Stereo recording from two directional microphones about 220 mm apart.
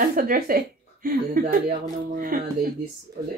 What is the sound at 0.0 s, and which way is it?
A woman's voice, 40° right (ahead or behind).